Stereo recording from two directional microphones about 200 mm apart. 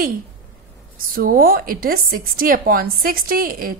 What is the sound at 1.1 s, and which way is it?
A woman's voice, 45° right (ahead or behind).